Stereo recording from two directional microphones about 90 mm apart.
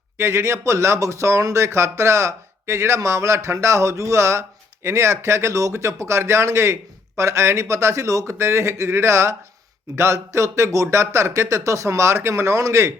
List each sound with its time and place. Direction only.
0.2 s speech: 30° right (ahead or behind)